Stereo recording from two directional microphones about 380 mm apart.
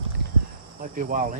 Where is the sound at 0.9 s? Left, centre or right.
Centre.